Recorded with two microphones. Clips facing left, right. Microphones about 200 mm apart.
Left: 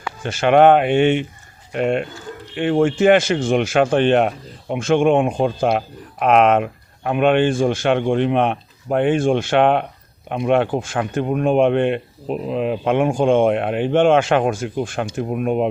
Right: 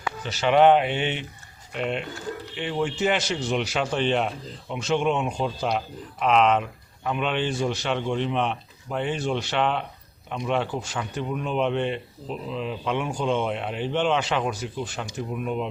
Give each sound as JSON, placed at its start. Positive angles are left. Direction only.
{"t": 0.2, "sound": "speech", "side_deg": 50}